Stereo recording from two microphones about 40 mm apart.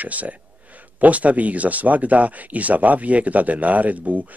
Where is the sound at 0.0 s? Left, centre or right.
Right.